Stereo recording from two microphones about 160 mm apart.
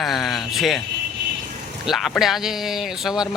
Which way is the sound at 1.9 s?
Centre (ahead or behind).